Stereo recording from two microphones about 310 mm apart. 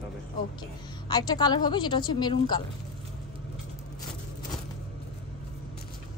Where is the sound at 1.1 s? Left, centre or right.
Centre.